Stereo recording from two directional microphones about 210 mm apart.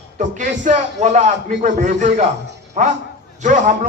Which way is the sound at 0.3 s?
35° right (ahead or behind).